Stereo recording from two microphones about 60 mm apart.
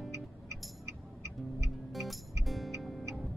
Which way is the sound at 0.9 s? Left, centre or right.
Right.